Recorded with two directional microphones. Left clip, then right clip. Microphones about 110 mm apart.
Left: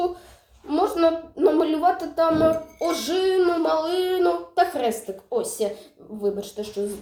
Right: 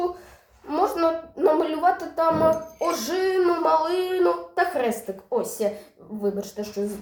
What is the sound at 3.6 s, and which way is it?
Speech, 5° left (ahead or behind).